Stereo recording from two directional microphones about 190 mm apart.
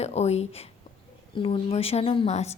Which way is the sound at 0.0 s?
35° left (ahead or behind).